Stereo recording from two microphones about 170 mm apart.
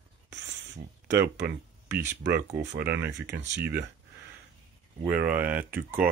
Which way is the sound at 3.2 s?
90° right.